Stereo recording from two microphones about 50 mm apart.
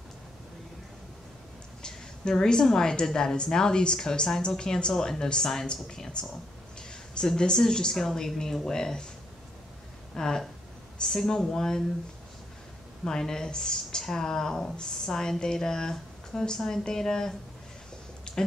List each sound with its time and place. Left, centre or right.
1.8 s a woman's voice: centre
10.1 s a woman's voice: centre
13.0 s a woman's voice: centre
18.3 s a sound: centre